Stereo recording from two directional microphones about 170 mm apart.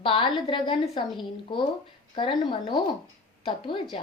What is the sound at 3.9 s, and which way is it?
Speech, 35° left (ahead or behind).